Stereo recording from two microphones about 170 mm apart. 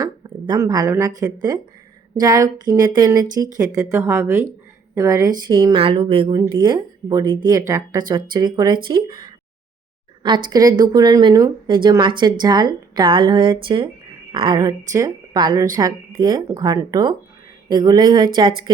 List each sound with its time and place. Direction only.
0.0 s a woman's voice: 20° right (ahead or behind)
10.2 s speech: 25° right (ahead or behind)